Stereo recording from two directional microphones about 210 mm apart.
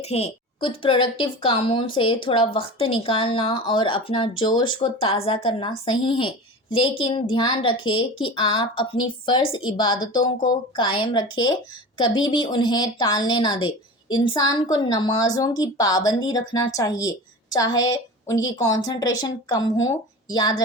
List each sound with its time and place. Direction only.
0.0 s a woman's voice: 30° left (ahead or behind)